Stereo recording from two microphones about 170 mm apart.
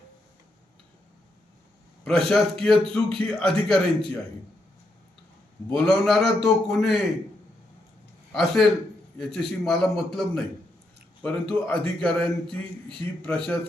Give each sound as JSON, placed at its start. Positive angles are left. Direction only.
{"t": 2.0, "sound": "a man's voice", "side_deg": 0}
{"t": 5.6, "sound": "a man's voice", "side_deg": 5}
{"t": 8.3, "sound": "a man's voice", "side_deg": 0}